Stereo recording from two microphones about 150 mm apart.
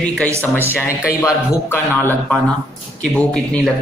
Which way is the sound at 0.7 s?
20° left (ahead or behind).